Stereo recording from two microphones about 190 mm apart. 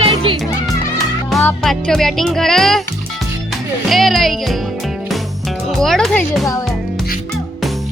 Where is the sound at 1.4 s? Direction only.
10° left (ahead or behind).